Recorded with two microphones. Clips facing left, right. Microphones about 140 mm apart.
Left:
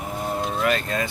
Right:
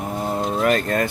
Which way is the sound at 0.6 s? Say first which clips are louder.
Right 5 dB; 45° right (ahead or behind).